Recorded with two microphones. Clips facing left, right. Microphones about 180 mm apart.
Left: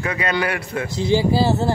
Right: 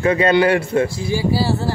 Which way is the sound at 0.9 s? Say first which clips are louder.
Left 2 dB; 20° left (ahead or behind).